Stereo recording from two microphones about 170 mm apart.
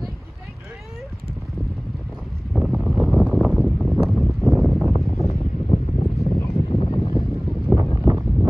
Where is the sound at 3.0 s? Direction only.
Centre (ahead or behind).